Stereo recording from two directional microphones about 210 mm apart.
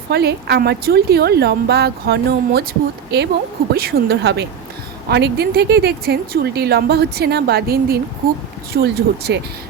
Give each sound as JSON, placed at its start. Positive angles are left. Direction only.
{"t": 0.1, "sound": "speech", "side_deg": -50}